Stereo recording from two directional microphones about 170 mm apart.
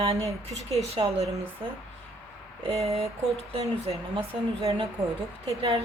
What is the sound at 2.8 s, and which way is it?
A woman's voice, 35° right (ahead or behind).